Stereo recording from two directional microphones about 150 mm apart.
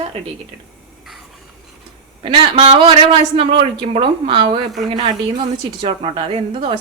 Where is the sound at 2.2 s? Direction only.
35° right (ahead or behind).